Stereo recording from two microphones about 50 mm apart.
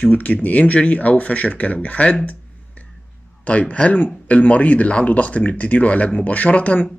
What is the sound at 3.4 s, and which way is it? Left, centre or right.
Speech, left.